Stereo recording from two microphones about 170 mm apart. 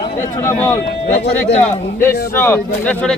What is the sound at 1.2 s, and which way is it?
Speech, 75° left (ahead or behind).